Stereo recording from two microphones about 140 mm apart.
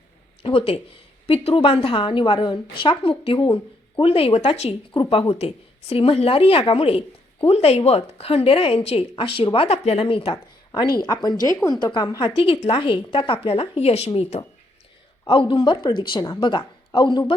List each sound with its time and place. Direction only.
0.4 s a woman's voice: 40° left (ahead or behind)
11.1 s a woman's voice: 30° left (ahead or behind)
12.4 s a woman's voice: 40° left (ahead or behind)